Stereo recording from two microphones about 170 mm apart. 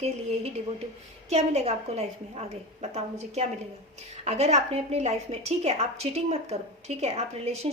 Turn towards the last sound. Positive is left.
turn(degrees=-35)  # may be behind; listen again after turning